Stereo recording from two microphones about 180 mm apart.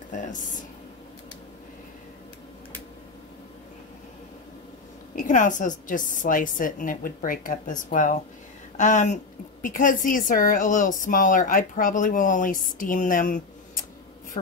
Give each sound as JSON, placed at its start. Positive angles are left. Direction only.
{"t": 0.1, "sound": "speech", "side_deg": 45}
{"t": 5.1, "sound": "a woman's voice", "side_deg": 45}